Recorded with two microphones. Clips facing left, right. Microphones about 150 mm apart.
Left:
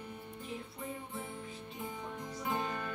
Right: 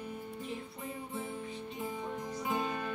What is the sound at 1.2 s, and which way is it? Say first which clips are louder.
Music: right 4 dB; centre (ahead or behind).